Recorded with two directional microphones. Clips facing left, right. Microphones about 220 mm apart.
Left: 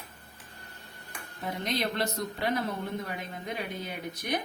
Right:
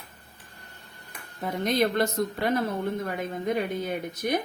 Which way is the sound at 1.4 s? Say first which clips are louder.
Right 7 dB; 50° right (ahead or behind).